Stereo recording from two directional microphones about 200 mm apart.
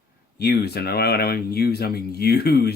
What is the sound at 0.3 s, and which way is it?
Speech, 55° left (ahead or behind).